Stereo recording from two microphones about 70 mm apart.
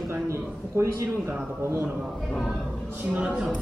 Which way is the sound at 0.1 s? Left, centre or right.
Right.